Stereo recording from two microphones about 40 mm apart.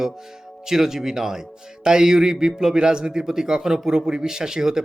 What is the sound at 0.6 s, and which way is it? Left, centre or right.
Speech, centre.